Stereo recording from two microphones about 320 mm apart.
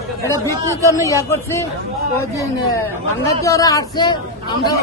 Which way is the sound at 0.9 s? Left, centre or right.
Centre.